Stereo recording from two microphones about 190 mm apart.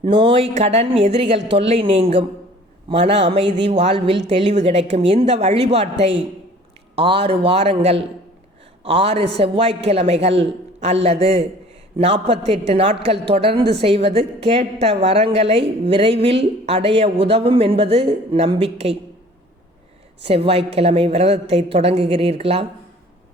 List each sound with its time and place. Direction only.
0.0 s a woman's voice: 30° right (ahead or behind)
20.2 s a woman's voice: 30° right (ahead or behind)